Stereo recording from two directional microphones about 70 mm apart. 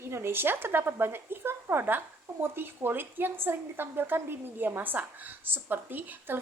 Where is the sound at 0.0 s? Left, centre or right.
Right.